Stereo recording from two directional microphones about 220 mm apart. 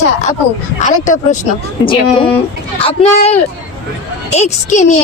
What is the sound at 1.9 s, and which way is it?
Speech, 20° left (ahead or behind).